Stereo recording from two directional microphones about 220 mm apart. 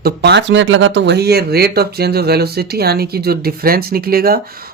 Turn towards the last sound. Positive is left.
turn(degrees=-45)  # may be behind; listen again after turning